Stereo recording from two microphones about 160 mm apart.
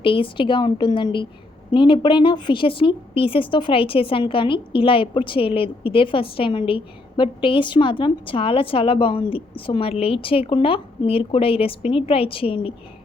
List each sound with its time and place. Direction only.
0.0 s a woman's voice: 35° left (ahead or behind)